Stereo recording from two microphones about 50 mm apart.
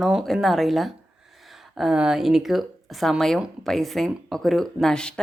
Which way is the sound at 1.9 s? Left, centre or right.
Centre.